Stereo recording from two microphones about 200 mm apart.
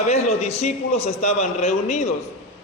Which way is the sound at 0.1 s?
30° left (ahead or behind).